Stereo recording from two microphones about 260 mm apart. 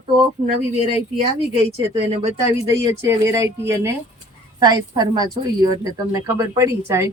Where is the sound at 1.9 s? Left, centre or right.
Centre.